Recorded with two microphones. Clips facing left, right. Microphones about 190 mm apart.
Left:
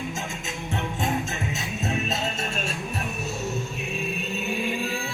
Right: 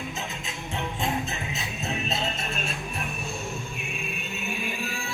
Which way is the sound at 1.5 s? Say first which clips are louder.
Left 5 dB; 45° left (ahead or behind).